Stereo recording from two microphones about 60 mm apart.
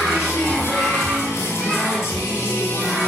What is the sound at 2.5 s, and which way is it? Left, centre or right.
Music, left.